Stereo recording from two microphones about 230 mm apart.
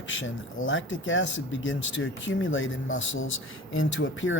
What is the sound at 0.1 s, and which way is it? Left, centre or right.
Speech, left.